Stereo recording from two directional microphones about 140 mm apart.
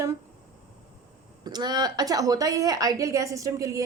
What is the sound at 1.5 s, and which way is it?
A woman's voice, 30° right (ahead or behind).